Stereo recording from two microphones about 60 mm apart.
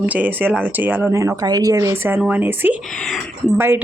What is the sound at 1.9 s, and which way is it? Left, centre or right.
Speech, right.